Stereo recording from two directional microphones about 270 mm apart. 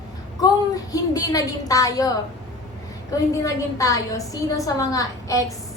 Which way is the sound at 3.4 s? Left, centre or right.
Centre.